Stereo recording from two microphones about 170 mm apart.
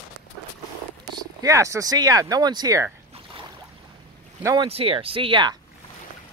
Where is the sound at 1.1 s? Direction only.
20° right (ahead or behind).